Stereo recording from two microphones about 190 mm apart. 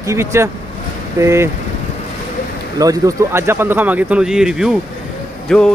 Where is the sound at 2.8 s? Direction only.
20° right (ahead or behind); by 5.6 s centre (ahead or behind).